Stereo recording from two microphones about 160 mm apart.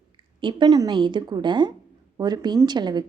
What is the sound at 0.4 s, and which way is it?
A woman's voice, 25° right (ahead or behind).